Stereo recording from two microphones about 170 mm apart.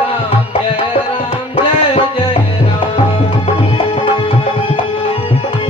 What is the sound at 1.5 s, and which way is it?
Music, 35° left (ahead or behind).